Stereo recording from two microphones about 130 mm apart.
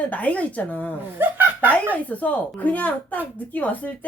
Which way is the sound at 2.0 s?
10° left (ahead or behind).